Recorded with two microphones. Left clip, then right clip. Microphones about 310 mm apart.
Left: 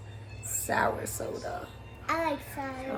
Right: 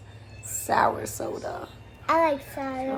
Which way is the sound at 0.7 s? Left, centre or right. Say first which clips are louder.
Right 6 dB; centre.